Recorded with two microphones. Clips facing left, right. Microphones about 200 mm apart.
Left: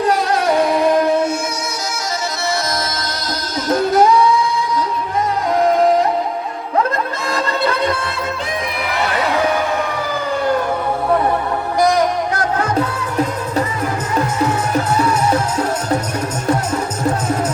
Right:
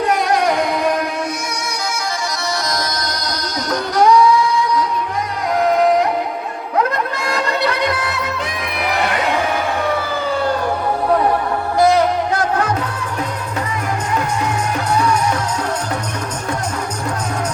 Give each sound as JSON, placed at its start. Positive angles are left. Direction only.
{"t": 1.0, "sound": "music", "side_deg": 25}
{"t": 3.7, "sound": "music", "side_deg": 25}
{"t": 7.3, "sound": "music", "side_deg": 25}
{"t": 11.8, "sound": "music", "side_deg": 15}